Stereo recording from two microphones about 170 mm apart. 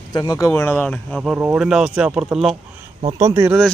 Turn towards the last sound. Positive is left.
turn(degrees=-15)  # may be behind; listen again after turning